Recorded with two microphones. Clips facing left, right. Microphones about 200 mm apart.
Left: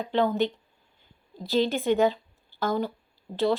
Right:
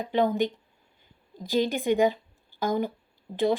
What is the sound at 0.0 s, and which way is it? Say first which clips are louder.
A woman's voice: even; 15° right (ahead or behind).